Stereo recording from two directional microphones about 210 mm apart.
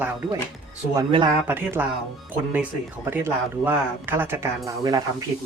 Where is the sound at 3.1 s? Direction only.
10° right (ahead or behind).